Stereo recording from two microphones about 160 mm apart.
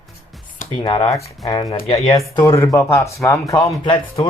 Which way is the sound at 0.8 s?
35° left (ahead or behind).